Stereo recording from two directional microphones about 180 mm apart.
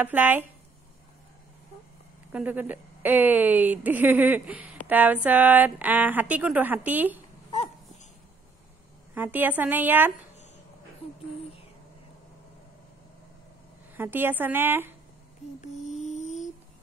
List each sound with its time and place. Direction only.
0.0 s speech: 10° right (ahead or behind)
2.3 s speech: 10° right (ahead or behind)
9.1 s speech: 10° right (ahead or behind)
13.9 s speech: 10° right (ahead or behind)
15.6 s mantra: 40° left (ahead or behind)